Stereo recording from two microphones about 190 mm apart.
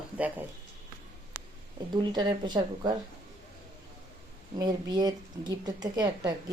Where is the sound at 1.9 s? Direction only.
20° right (ahead or behind).